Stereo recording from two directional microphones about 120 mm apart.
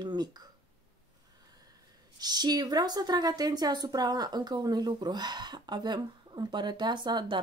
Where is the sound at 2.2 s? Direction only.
35° right (ahead or behind).